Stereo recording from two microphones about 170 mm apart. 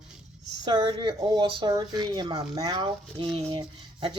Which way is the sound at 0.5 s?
25° right (ahead or behind).